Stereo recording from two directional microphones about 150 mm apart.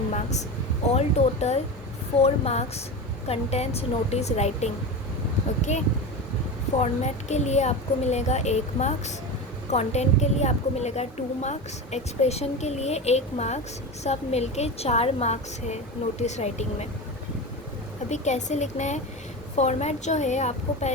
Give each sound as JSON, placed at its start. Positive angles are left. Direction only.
{"t": 0.1, "sound": "air conditioning", "side_deg": 50}
{"t": 0.9, "sound": "a woman's voice", "side_deg": 45}
{"t": 6.7, "sound": "a woman's voice", "side_deg": 50}
{"t": 18.1, "sound": "a woman's voice", "side_deg": 50}